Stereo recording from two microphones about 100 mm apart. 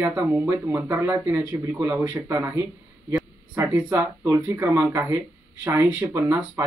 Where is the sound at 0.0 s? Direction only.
25° right (ahead or behind).